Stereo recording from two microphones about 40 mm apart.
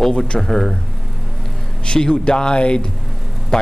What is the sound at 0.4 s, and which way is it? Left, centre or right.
Speech, centre.